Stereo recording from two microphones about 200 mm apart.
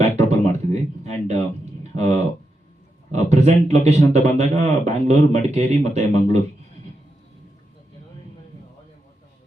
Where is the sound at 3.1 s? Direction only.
35° right (ahead or behind).